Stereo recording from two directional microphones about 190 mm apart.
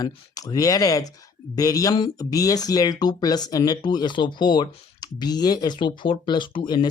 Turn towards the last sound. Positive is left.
turn(degrees=25)  # may be behind; listen again after turning